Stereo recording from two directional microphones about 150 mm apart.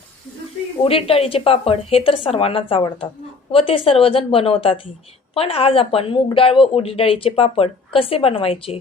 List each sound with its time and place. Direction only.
0.9 s speech: 40° left (ahead or behind)